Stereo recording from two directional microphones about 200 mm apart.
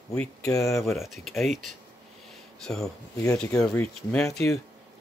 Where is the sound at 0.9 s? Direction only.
Centre (ahead or behind).